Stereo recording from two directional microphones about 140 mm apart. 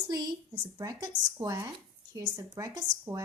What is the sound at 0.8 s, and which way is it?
A woman's voice, 25° right (ahead or behind).